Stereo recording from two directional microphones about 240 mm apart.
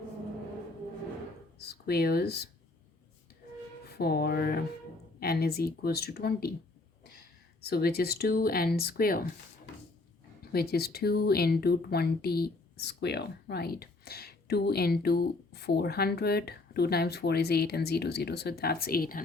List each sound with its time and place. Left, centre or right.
1.5 s speech: left
3.8 s speech: left
7.6 s speech: left
10.4 s speech: left